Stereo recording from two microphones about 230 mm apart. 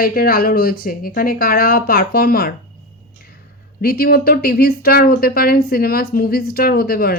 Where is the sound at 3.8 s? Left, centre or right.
Left.